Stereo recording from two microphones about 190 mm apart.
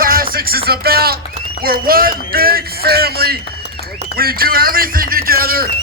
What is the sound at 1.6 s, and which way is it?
A man's voice, 50° right (ahead or behind).